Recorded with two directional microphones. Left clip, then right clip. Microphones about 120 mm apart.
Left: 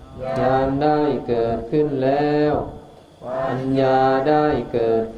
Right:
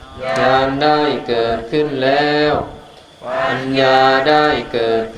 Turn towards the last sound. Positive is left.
turn(degrees=-30)  # may be behind; listen again after turning